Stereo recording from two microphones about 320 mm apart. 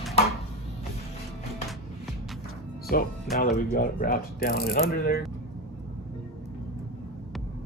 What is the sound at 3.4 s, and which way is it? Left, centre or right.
Speech, left.